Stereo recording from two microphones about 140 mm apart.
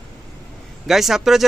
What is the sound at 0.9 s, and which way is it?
Speech, centre (ahead or behind).